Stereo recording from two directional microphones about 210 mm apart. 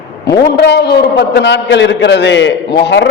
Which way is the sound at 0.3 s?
50° left (ahead or behind).